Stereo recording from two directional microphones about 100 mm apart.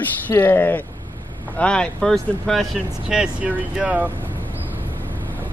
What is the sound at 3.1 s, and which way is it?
Speech, 5° right (ahead or behind).